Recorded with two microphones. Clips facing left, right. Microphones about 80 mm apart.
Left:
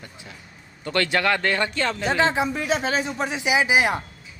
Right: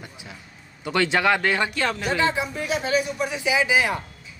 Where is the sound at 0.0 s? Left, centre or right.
Centre.